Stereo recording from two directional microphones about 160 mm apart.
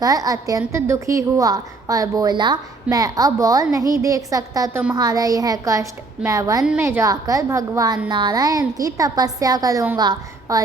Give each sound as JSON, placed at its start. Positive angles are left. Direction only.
{"t": 0.0, "sound": "a woman's voice", "side_deg": -20}